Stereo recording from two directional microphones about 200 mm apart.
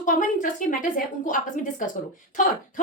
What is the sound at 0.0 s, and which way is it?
A woman's voice, 40° left (ahead or behind).